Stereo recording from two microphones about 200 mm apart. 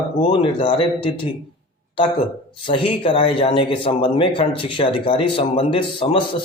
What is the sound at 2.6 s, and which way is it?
Speech, 25° left (ahead or behind).